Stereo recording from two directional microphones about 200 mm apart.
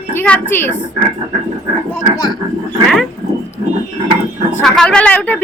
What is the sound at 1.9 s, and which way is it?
Speech, 20° left (ahead or behind).